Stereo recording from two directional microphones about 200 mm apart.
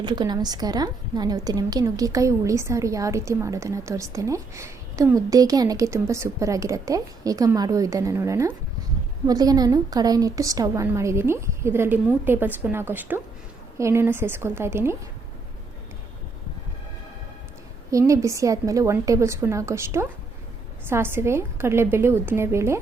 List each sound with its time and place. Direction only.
0.0 s a woman's voice: 20° right (ahead or behind)
17.9 s a woman's voice: 15° right (ahead or behind)